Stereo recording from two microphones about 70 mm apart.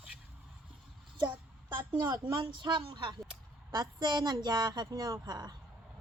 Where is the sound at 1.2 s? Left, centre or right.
Right.